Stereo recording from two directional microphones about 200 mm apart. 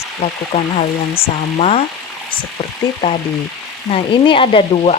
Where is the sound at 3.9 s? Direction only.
25° left (ahead or behind).